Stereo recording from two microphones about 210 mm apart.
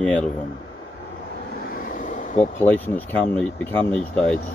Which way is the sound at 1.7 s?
40° left (ahead or behind).